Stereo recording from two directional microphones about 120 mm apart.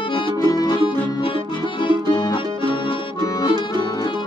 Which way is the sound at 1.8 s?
45° left (ahead or behind).